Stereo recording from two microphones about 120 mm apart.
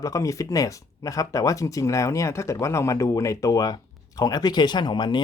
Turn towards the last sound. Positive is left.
turn(degrees=40)  # may be behind; listen again after turning